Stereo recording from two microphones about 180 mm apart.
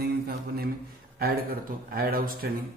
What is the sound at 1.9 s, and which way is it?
Speech, 55° right (ahead or behind).